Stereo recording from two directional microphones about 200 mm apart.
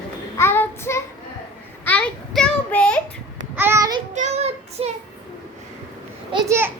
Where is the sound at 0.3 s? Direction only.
10° left (ahead or behind).